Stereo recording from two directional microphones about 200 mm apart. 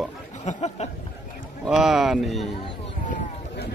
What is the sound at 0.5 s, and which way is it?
Speech, 30° left (ahead or behind).